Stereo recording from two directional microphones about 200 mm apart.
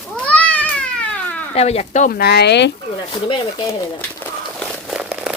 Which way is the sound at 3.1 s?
25° left (ahead or behind).